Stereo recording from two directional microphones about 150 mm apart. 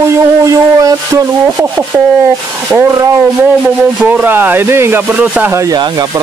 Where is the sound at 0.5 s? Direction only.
20° right (ahead or behind).